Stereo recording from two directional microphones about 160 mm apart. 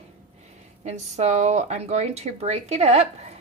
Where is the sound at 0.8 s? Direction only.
45° right (ahead or behind).